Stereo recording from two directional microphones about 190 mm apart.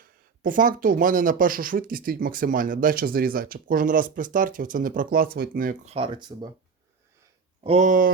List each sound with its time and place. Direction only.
0.0 s speech: 45° right (ahead or behind)
5.9 s speech: 25° right (ahead or behind)
7.6 s speech: 35° right (ahead or behind)